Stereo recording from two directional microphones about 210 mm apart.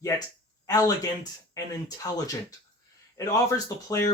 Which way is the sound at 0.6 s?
15° left (ahead or behind).